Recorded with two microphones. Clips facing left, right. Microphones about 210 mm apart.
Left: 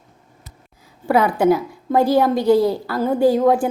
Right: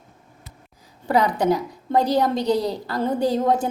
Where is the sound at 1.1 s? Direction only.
15° right (ahead or behind).